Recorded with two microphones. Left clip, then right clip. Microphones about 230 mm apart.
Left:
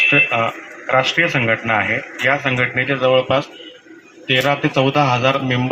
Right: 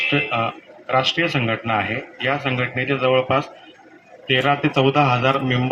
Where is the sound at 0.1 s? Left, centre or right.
Centre.